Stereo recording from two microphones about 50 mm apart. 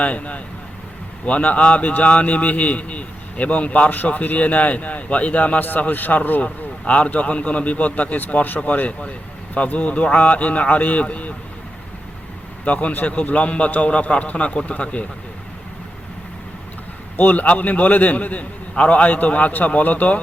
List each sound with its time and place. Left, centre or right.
0.0 s speech: left
6.8 s speech: left
12.6 s speech: left
17.2 s a man's voice: left